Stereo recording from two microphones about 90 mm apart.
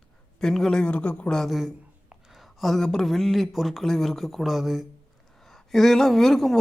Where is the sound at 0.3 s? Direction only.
5° left (ahead or behind).